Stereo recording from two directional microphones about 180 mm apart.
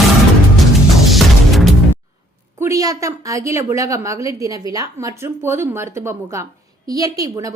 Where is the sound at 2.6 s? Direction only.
20° right (ahead or behind).